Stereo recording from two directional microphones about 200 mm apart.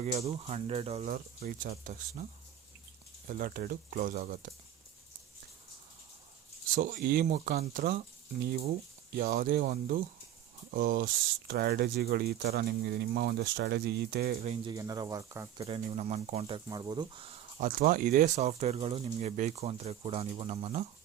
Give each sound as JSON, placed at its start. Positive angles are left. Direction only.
{"t": 0.0, "sound": "speech", "side_deg": -35}
{"t": 1.0, "sound": "speech", "side_deg": -45}
{"t": 3.2, "sound": "speech", "side_deg": -45}
{"t": 6.7, "sound": "speech", "side_deg": -40}
{"t": 9.1, "sound": "speech", "side_deg": -50}
{"t": 14.4, "sound": "speech", "side_deg": -30}
{"t": 14.7, "sound": "speech", "side_deg": -20}
{"t": 15.6, "sound": "speech", "side_deg": -30}
{"t": 16.6, "sound": "speech", "side_deg": -20}
{"t": 17.6, "sound": "speech", "side_deg": -45}
{"t": 18.3, "sound": "speech", "side_deg": -35}